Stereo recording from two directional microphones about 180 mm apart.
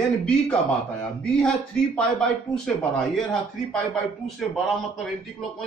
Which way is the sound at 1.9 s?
5° left (ahead or behind).